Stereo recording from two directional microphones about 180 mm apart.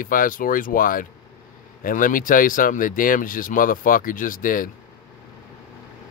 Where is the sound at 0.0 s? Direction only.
50° left (ahead or behind).